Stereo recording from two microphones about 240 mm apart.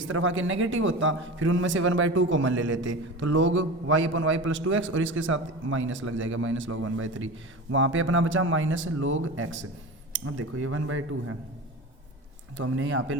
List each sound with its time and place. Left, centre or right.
0.0 s a man's voice: right
12.5 s a man's voice: right